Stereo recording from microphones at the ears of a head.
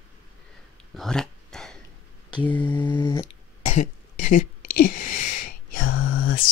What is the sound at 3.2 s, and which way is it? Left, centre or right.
Throat clearing, left.